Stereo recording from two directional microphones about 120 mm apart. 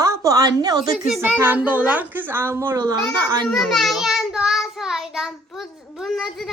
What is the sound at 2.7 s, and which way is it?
Speech, 35° right (ahead or behind).